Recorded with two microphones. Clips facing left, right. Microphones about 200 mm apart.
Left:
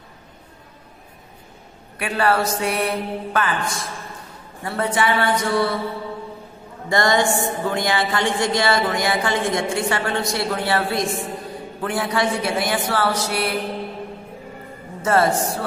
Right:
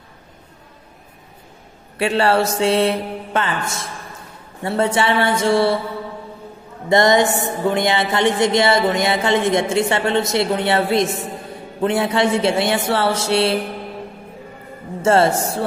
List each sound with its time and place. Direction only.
2.0 s a woman's voice: 25° right (ahead or behind)
6.9 s a woman's voice: 20° right (ahead or behind)
15.0 s a woman's voice: 25° right (ahead or behind)